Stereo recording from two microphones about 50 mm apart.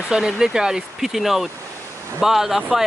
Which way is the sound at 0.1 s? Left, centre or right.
Centre.